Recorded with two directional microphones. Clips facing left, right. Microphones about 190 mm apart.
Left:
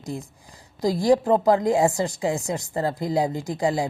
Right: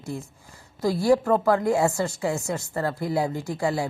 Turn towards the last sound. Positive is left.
turn(degrees=15)  # may be behind; listen again after turning